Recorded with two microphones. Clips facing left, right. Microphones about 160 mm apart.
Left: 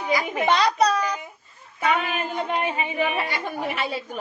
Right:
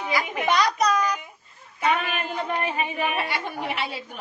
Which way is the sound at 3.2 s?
45° left (ahead or behind).